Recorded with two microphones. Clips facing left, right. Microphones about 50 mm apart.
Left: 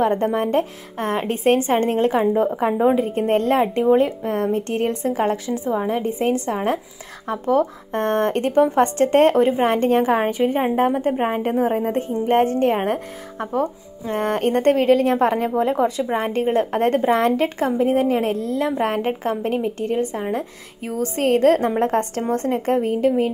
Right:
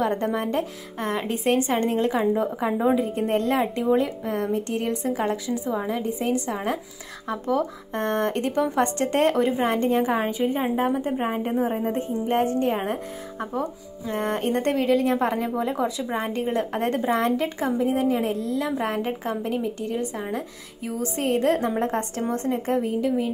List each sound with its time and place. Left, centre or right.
0.0 s a woman's voice: left
20.9 s a woman's voice: left